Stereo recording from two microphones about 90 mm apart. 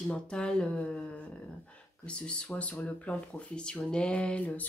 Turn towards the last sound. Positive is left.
turn(degrees=15)  # may be behind; listen again after turning